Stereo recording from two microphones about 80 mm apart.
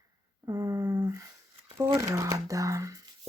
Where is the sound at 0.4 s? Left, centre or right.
Right.